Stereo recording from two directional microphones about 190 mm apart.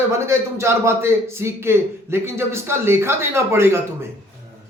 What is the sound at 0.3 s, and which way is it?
A man's voice, 15° right (ahead or behind).